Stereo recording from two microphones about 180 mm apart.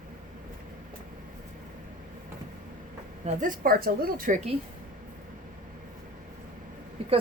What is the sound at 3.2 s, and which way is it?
Speech, 45° right (ahead or behind).